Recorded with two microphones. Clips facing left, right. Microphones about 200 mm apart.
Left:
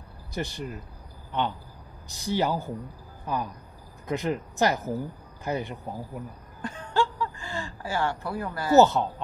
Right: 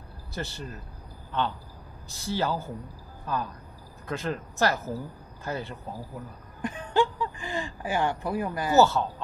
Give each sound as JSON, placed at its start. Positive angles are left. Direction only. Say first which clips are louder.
{"t": 0.3, "sound": "speech", "louder": "left 3 dB", "side_deg": 15}
{"t": 6.6, "sound": "a sound", "louder": "right 2 dB", "side_deg": -15}
{"t": 8.7, "sound": "speech", "louder": "left 3 dB", "side_deg": 20}